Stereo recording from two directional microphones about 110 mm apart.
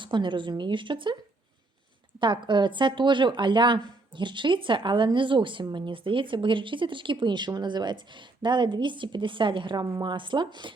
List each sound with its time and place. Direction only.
0.0 s a woman's voice: 45° right (ahead or behind)
2.2 s a woman's voice: 45° right (ahead or behind)